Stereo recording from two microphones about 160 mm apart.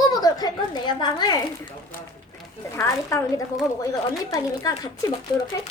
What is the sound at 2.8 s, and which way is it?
A child's voice, 20° left (ahead or behind).